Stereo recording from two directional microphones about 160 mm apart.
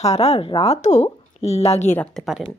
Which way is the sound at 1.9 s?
5° left (ahead or behind).